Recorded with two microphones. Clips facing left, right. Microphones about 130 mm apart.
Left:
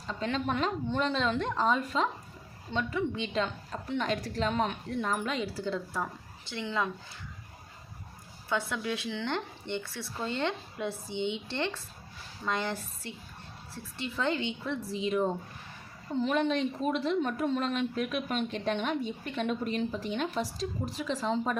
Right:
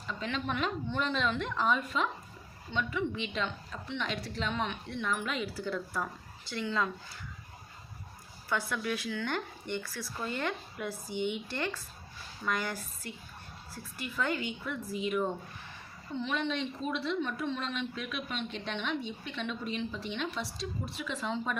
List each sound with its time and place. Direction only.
0.1 s a woman's voice: 35° left (ahead or behind); by 6.9 s 20° left (ahead or behind)
8.4 s a woman's voice: 20° left (ahead or behind)
16.1 s a woman's voice: 40° left (ahead or behind)